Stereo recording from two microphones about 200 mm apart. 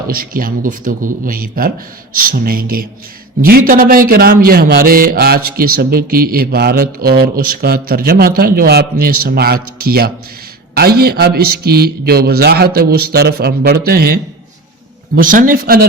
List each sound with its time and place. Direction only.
0.1 s a man's voice: 45° right (ahead or behind)